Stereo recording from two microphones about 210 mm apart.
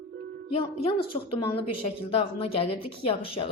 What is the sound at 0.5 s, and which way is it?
A woman's voice, 25° left (ahead or behind).